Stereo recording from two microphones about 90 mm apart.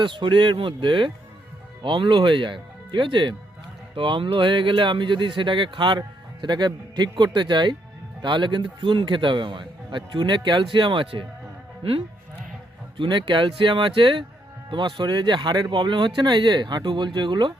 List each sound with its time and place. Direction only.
0.0 s speech: 65° right (ahead or behind)
11.8 s speech: 90° right
13.0 s speech: 60° right (ahead or behind)